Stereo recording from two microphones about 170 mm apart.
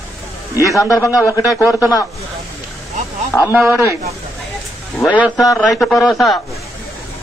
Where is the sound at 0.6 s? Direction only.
20° left (ahead or behind).